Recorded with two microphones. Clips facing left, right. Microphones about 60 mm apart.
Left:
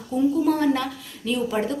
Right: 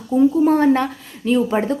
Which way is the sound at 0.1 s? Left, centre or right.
Right.